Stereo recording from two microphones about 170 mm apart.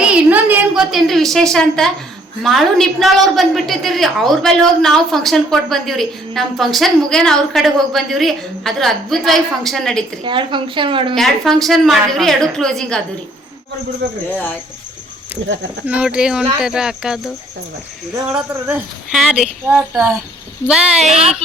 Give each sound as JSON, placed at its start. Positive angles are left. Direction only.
{"t": 0.0, "sound": "a sound", "side_deg": -10}
{"t": 2.4, "sound": "a woman's voice", "side_deg": 0}
{"t": 10.2, "sound": "a woman's voice", "side_deg": -30}
{"t": 11.1, "sound": "a woman's voice", "side_deg": 0}
{"t": 15.9, "sound": "a woman's voice", "side_deg": -5}
{"t": 21.1, "sound": "speech", "side_deg": -35}